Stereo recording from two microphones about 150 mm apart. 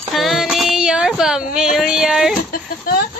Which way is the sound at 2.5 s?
80° left.